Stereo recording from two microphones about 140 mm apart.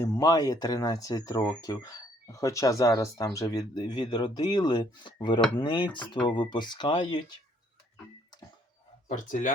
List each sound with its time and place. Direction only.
0.0 s speech: 25° left (ahead or behind)
9.0 s speech: 65° left (ahead or behind)